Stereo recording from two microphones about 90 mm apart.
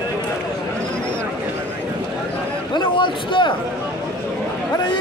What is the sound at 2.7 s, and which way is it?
Speech, 60° left (ahead or behind).